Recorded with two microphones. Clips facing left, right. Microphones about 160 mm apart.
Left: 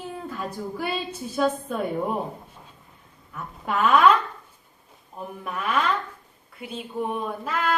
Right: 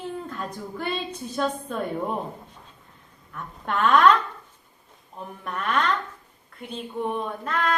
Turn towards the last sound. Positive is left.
turn(degrees=5)  # may be behind; listen again after turning